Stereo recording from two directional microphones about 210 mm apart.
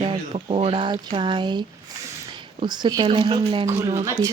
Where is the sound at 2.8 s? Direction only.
20° right (ahead or behind).